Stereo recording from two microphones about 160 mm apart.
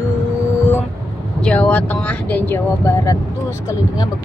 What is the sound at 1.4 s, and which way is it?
Speech, 5° left (ahead or behind).